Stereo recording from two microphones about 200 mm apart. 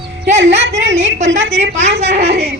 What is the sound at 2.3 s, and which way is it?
Speech, 55° right (ahead or behind).